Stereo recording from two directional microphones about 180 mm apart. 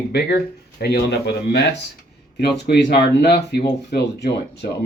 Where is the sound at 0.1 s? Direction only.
65° left (ahead or behind).